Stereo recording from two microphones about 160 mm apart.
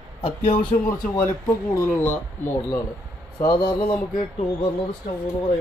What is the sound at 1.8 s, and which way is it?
Speech, 15° left (ahead or behind).